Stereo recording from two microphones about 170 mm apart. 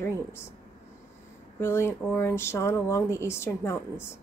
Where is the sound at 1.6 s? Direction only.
15° left (ahead or behind).